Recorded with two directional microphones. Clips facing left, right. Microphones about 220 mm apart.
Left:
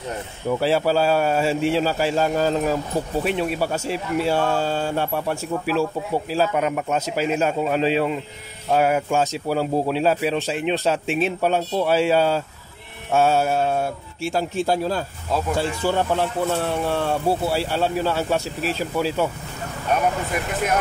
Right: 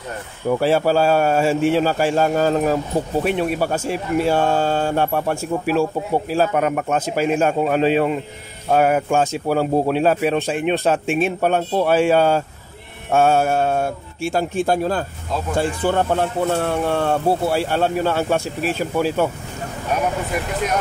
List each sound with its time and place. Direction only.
0.5 s speech: 50° right (ahead or behind)